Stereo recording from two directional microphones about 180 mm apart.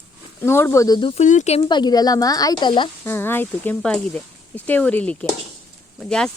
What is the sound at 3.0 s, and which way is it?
Speech, 10° left (ahead or behind).